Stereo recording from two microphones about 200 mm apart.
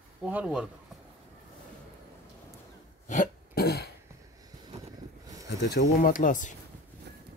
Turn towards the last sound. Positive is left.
turn(degrees=40)  # may be behind; listen again after turning